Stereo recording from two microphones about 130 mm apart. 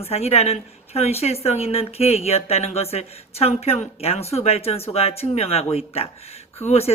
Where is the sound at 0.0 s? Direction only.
50° left (ahead or behind).